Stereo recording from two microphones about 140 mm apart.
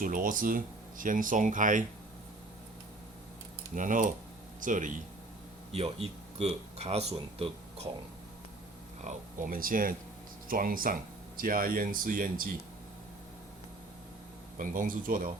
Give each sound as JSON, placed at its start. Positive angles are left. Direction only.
{"t": 0.0, "sound": "speech", "side_deg": -75}
{"t": 3.8, "sound": "speech", "side_deg": -70}
{"t": 5.7, "sound": "speech", "side_deg": -45}
{"t": 9.0, "sound": "speech", "side_deg": -80}
{"t": 14.6, "sound": "speech", "side_deg": -75}